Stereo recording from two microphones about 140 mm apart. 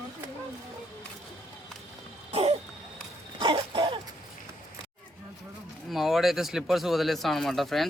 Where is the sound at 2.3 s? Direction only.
45° right (ahead or behind).